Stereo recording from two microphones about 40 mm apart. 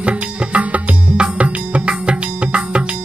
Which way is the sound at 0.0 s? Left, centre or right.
Right.